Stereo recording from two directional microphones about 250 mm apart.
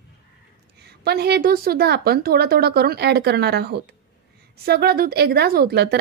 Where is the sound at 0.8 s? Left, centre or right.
Right.